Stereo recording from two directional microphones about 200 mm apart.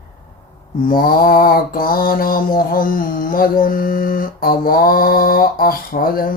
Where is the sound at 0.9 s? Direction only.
45° left (ahead or behind).